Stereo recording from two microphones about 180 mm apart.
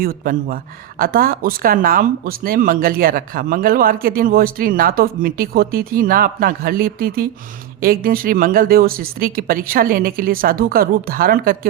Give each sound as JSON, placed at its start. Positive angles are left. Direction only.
{"t": 0.0, "sound": "a woman's voice", "side_deg": -55}